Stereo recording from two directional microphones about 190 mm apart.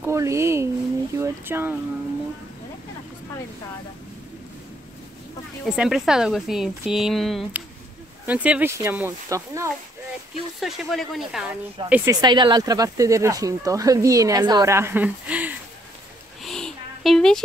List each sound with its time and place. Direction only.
0.0 s speech: 15° right (ahead or behind)
5.7 s speech: 5° right (ahead or behind)
10.6 s speech: centre (ahead or behind)
11.9 s speech: 15° right (ahead or behind)
16.4 s a sound: centre (ahead or behind)